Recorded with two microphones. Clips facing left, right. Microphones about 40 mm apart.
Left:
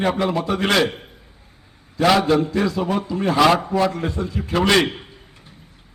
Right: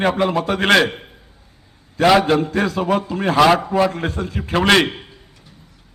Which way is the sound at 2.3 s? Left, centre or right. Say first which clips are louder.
Right 1 dB; right.